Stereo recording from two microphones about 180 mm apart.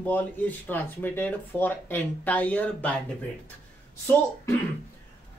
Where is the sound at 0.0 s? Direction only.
10° left (ahead or behind).